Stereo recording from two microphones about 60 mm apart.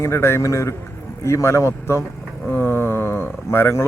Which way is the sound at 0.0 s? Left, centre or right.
Left.